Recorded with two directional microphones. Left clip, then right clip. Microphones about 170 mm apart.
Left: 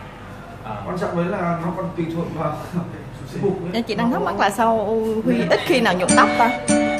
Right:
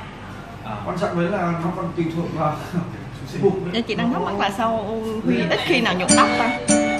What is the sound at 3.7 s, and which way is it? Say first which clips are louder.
A woman's voice: left 1 dB; 30° left (ahead or behind).